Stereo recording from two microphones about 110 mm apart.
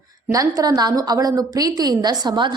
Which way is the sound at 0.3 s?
30° right (ahead or behind).